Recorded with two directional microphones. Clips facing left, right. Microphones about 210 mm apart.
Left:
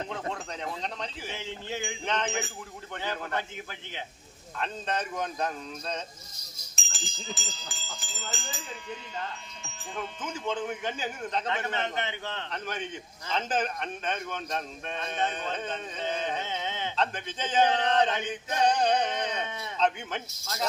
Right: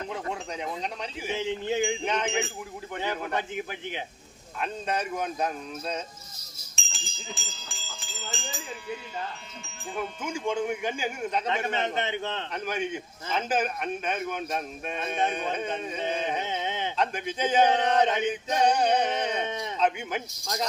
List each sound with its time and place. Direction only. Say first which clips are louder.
0.1 s speech: right 2 dB; 10° right (ahead or behind)
6.8 s sheep: right 2 dB; centre (ahead or behind)
9.9 s speech: right 4 dB; 10° right (ahead or behind)